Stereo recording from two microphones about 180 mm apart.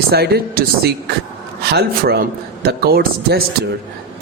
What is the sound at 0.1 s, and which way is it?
A man's voice, 60° right (ahead or behind).